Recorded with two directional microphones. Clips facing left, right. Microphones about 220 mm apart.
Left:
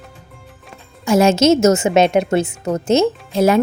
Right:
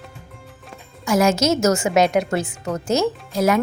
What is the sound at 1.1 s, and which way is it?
A woman's voice, 25° left (ahead or behind).